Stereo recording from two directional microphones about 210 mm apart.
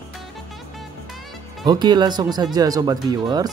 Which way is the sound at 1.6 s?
20° right (ahead or behind).